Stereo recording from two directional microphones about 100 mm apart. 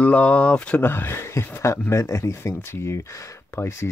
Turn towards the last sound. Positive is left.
turn(degrees=25)  # may be behind; listen again after turning